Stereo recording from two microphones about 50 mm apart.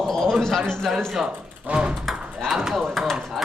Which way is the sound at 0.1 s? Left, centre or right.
Centre.